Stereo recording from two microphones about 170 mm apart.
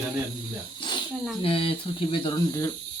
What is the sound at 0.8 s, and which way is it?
Snake, 25° left (ahead or behind).